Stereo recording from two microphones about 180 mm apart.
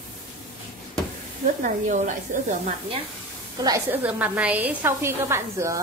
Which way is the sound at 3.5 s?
20° right (ahead or behind).